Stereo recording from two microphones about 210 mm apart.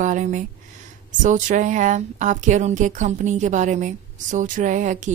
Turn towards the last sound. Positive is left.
turn(degrees=-35)  # may be behind; listen again after turning